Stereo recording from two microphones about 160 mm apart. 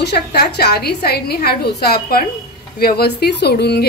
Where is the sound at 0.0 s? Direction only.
90° left.